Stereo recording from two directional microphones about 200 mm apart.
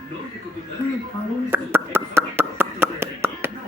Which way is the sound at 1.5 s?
10° right (ahead or behind).